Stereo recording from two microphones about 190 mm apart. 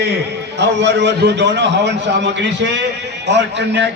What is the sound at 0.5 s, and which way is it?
A man's voice, 65° right (ahead or behind).